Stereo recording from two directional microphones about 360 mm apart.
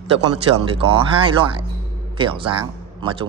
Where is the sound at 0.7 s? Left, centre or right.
Centre.